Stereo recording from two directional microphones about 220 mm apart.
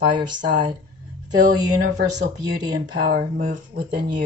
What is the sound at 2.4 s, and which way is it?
Speech, 20° right (ahead or behind).